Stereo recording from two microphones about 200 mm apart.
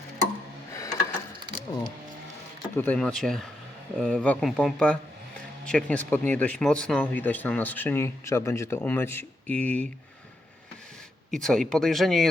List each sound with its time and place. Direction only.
0.7 s a sound: 15° left (ahead or behind)
2.7 s speech: 10° left (ahead or behind)
11.3 s speech: centre (ahead or behind)